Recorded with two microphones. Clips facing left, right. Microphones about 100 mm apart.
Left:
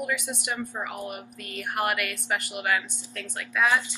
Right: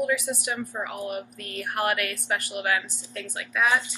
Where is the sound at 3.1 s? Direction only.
10° right (ahead or behind).